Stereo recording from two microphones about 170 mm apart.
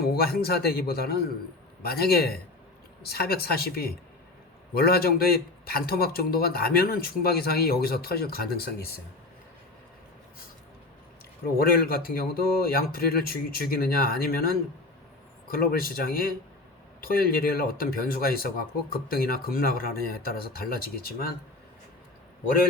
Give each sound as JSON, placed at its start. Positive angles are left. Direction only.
{"t": 0.0, "sound": "speech", "side_deg": 65}
{"t": 11.4, "sound": "speech", "side_deg": 60}